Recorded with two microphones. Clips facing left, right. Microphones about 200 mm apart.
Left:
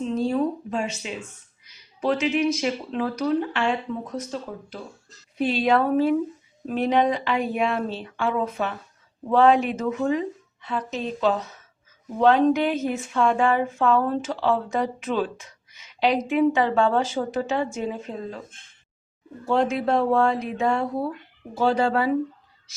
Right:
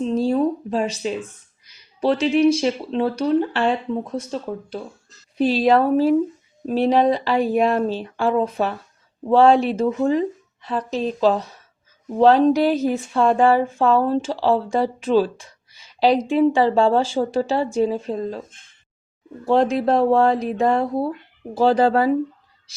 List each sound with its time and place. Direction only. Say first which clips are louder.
0.0 s a sound: right 4 dB; 35° right (ahead or behind)
2.0 s speech: right 5 dB; 35° right (ahead or behind)
19.5 s speech: right 4 dB; 35° right (ahead or behind)